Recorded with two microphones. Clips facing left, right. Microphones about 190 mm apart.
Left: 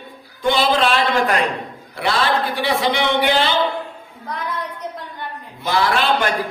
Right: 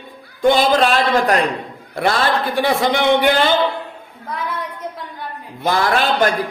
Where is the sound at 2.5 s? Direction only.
50° right (ahead or behind).